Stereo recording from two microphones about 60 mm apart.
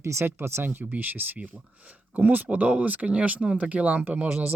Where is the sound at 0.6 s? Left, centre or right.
Right.